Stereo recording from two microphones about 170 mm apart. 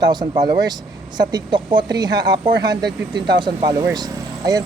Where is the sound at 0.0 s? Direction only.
25° right (ahead or behind).